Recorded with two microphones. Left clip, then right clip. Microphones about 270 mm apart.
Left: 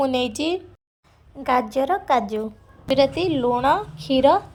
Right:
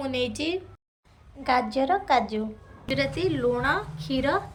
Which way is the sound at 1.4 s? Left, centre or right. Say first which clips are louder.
Left 3 dB; left.